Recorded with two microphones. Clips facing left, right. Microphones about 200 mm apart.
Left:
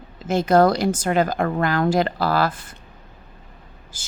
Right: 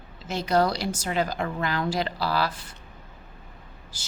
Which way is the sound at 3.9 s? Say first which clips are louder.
Left 6 dB; 50° left (ahead or behind).